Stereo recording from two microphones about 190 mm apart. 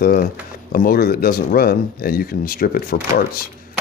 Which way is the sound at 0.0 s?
50° left (ahead or behind).